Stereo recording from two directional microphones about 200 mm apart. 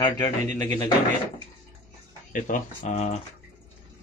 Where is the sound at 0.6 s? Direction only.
20° left (ahead or behind).